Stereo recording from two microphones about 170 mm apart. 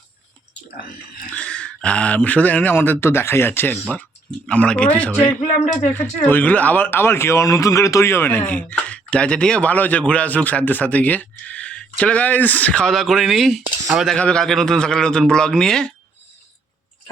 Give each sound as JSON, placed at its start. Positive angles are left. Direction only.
{"t": 1.3, "sound": "speech", "side_deg": 5}
{"t": 5.5, "sound": "speech", "side_deg": 45}
{"t": 6.0, "sound": "speech", "side_deg": 10}